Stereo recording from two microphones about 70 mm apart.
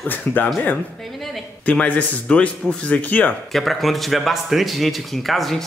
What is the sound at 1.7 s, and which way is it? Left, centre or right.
Speech, left.